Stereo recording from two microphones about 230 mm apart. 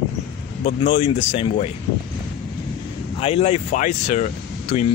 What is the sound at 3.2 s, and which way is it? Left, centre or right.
Speech, left.